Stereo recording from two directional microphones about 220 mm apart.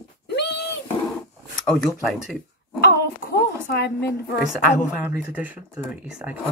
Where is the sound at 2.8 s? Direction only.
45° left (ahead or behind).